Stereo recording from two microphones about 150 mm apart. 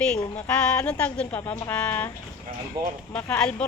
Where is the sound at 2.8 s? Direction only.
25° right (ahead or behind).